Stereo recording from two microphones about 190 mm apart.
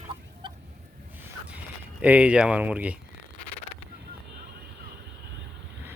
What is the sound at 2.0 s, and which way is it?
Speech, 5° right (ahead or behind).